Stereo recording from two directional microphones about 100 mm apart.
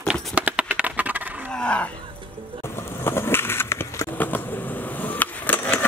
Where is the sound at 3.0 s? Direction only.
25° left (ahead or behind).